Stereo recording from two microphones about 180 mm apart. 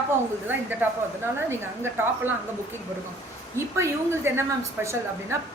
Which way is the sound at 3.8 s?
15° right (ahead or behind).